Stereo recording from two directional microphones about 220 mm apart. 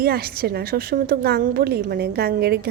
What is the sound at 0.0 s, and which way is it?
A woman's voice, 45° right (ahead or behind).